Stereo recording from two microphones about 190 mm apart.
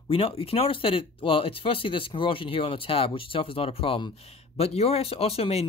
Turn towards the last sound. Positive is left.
turn(degrees=30)  # may be behind; listen again after turning